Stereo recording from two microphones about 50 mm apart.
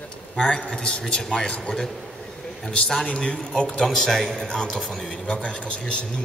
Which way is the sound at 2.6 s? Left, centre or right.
Centre.